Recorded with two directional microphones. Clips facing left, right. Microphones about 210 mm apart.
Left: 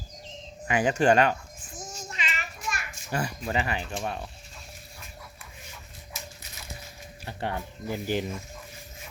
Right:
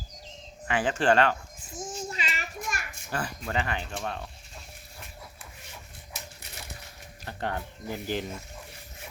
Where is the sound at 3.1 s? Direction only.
10° left (ahead or behind).